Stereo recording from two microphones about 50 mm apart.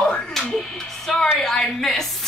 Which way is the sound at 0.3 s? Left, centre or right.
Centre.